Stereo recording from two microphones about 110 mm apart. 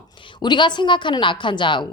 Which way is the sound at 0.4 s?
45° left (ahead or behind).